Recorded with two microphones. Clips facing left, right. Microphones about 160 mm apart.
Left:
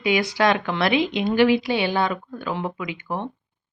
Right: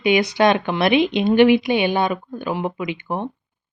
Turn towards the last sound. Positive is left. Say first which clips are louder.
# right 4 dB
turn(degrees=-20)  # may be behind; listen again after turning